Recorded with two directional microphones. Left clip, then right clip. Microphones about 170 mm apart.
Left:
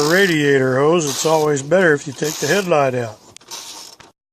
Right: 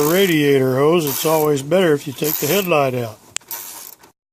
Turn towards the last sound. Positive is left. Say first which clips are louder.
# right 1 dB
turn(degrees=-5)  # may be behind; listen again after turning